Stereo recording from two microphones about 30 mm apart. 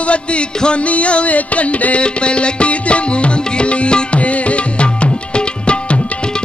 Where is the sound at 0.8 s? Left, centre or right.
Left.